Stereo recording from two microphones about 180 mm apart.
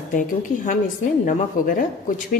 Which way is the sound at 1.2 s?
50° left (ahead or behind).